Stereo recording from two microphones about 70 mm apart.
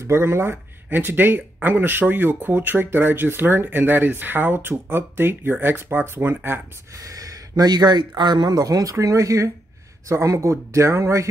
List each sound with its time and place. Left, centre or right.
0.0 s speech: right
7.2 s speech: right